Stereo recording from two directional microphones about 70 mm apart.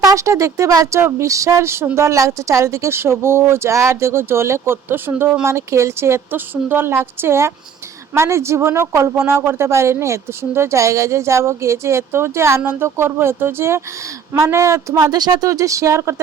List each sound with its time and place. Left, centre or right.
0.0 s speech: right
14.9 s speech: right
15.4 s speech: right